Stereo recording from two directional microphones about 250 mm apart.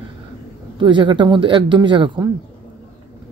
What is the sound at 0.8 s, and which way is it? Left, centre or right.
Speech, centre.